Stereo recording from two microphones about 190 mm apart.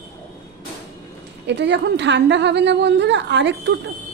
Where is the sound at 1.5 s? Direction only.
65° right (ahead or behind).